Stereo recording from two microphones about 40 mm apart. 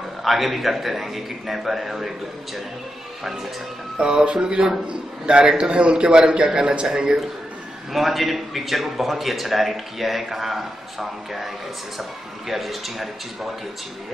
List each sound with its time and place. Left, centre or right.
0.2 s a man's voice: centre
4.0 s a man's voice: right
7.9 s a man's voice: centre